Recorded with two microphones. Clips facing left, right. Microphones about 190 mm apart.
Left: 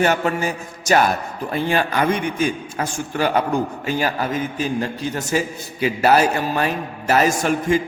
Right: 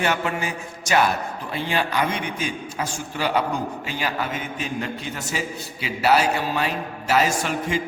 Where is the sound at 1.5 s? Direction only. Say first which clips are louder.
Left 4 dB; 50° left (ahead or behind).